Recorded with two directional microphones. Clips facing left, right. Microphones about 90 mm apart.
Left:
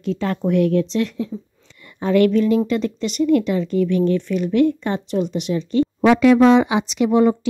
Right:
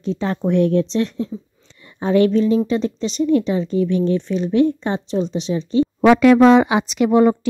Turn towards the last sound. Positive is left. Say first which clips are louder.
# right 2 dB
turn(degrees=-45)  # may be behind; listen again after turning